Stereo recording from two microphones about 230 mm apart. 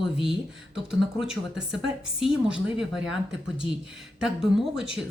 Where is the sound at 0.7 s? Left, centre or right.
Centre.